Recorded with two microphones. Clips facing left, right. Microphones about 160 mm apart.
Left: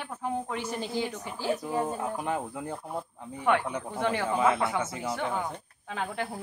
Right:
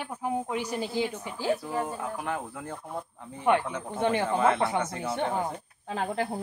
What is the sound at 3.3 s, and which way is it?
Speech, 20° right (ahead or behind).